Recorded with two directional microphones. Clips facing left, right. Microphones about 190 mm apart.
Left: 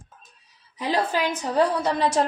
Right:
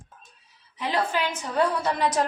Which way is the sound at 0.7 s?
40° left (ahead or behind).